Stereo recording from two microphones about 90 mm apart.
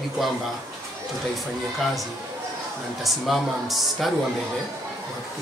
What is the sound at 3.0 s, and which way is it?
Speech, centre (ahead or behind).